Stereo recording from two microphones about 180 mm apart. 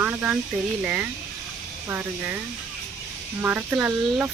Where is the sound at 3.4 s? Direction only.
10° right (ahead or behind).